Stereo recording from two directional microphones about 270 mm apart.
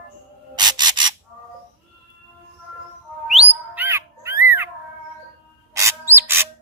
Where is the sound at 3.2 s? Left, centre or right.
Centre.